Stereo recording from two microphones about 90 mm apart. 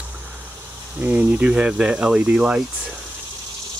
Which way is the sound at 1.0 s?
15° right (ahead or behind).